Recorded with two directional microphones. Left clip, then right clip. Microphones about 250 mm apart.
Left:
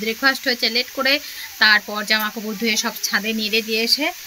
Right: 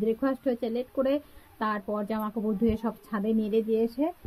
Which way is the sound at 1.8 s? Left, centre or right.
Centre.